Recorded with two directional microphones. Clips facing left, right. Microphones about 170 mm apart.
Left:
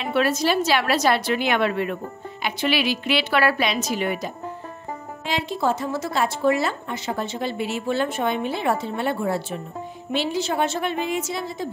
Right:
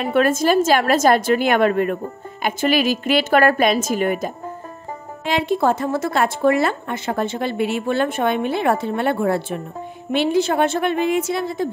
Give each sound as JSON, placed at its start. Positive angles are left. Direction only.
{"t": 0.0, "sound": "a woman's voice", "side_deg": -50}
{"t": 5.2, "sound": "a woman's voice", "side_deg": -55}